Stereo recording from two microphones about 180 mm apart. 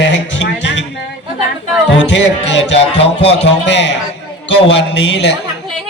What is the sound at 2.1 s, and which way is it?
Speech, 80° left.